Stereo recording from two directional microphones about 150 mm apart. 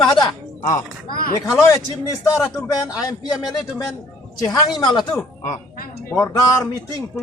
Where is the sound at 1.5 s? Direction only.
20° left (ahead or behind).